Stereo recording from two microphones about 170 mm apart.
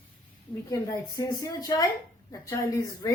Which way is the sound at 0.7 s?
20° left (ahead or behind).